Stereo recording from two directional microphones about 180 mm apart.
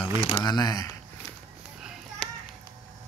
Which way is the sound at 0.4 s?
20° left (ahead or behind).